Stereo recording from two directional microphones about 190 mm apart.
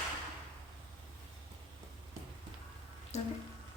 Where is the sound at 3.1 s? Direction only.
35° left (ahead or behind).